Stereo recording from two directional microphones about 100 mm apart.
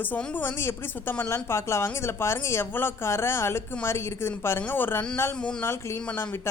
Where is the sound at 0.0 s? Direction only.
20° left (ahead or behind).